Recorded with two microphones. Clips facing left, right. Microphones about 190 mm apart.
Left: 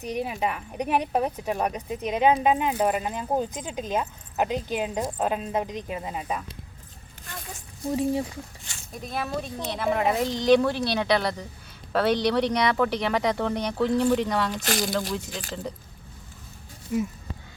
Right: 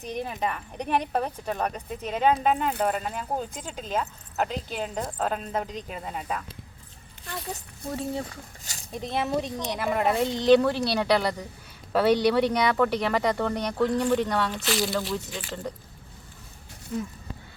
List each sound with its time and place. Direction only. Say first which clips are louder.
0.0 s speech: left 2 dB; 10° left (ahead or behind)
8.6 s speech: right 1 dB; 40° right (ahead or behind)
8.9 s speech: right 3 dB; 25° right (ahead or behind)
9.8 s speech: left 1 dB; centre (ahead or behind)
14.6 s speech: even; 45° left (ahead or behind)
16.9 s speech: left 5 dB; 10° left (ahead or behind)